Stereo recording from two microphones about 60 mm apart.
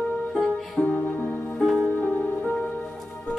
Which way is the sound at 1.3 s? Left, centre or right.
Centre.